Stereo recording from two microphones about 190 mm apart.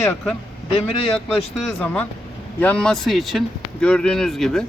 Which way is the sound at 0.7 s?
30° left (ahead or behind).